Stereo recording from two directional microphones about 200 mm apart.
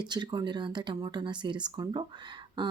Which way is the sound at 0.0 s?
20° right (ahead or behind).